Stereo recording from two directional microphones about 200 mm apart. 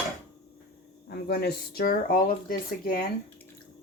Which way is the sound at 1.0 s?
55° left (ahead or behind).